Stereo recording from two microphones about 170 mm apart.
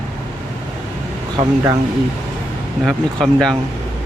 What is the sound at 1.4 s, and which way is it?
Speech, 20° right (ahead or behind).